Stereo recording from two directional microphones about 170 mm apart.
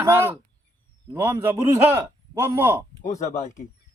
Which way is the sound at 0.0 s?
15° right (ahead or behind).